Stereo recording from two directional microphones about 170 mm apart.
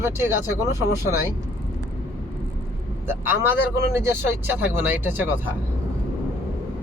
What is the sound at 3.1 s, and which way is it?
Speech, 15° right (ahead or behind).